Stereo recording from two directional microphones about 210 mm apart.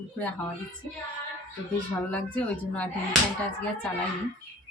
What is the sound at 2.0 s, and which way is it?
Speech, 5° left (ahead or behind).